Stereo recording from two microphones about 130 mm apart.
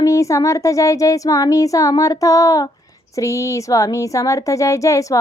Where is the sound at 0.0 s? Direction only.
25° left (ahead or behind).